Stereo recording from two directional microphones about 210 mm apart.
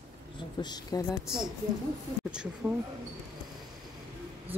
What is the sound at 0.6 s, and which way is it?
Speech, 20° left (ahead or behind).